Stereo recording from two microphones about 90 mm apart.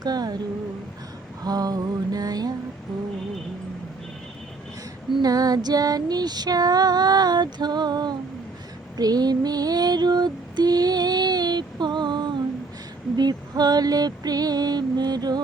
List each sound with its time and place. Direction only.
0.0 s female singing: 45° right (ahead or behind)
1.5 s female singing: 45° right (ahead or behind)
5.2 s female singing: 45° right (ahead or behind)